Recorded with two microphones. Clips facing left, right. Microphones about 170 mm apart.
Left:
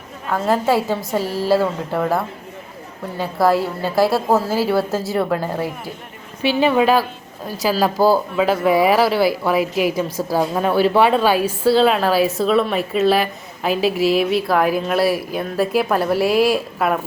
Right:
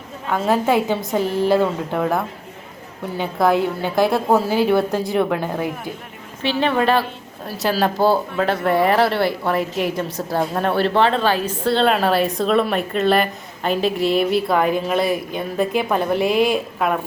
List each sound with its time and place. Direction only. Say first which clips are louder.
0.4 s speech: even; centre (ahead or behind)
1.2 s a woman's voice: right 3 dB; 20° right (ahead or behind)
1.5 s speech: even; 5° left (ahead or behind)